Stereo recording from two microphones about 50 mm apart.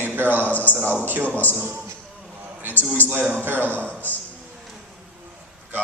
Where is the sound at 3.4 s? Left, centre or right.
Right.